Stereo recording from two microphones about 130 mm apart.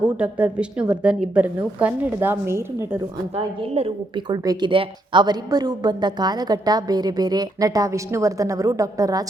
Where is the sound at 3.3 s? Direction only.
50° right (ahead or behind).